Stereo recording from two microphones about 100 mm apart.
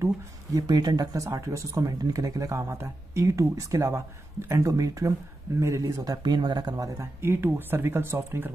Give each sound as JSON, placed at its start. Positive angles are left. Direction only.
{"t": 0.6, "sound": "speech", "side_deg": -40}
{"t": 7.0, "sound": "speech", "side_deg": -25}